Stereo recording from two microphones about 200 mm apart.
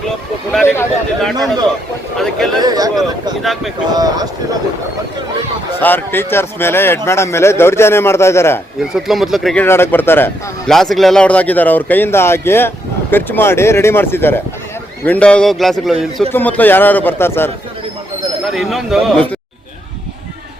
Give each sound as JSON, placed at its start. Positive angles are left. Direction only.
{"t": 0.5, "sound": "a man's voice", "side_deg": 5}
{"t": 2.6, "sound": "speech", "side_deg": -20}
{"t": 3.4, "sound": "a man's voice", "side_deg": 0}
{"t": 3.9, "sound": "speech", "side_deg": -20}
{"t": 5.8, "sound": "a man's voice", "side_deg": 10}
{"t": 9.0, "sound": "a man's voice", "side_deg": 0}
{"t": 9.6, "sound": "a man's voice", "side_deg": 10}
{"t": 18.5, "sound": "a man's voice", "side_deg": 0}